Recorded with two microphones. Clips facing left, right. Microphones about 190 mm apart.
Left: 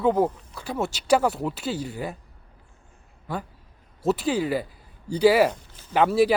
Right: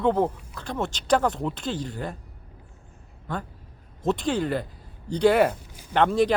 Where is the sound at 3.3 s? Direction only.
10° left (ahead or behind).